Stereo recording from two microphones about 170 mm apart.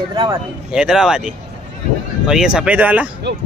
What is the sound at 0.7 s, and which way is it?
Speech, 5° right (ahead or behind).